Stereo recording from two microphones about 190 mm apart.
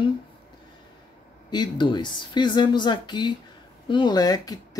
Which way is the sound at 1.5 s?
25° left (ahead or behind).